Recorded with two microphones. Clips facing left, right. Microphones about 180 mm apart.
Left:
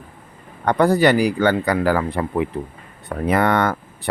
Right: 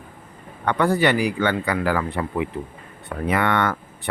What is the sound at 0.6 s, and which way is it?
Speech, 40° left (ahead or behind).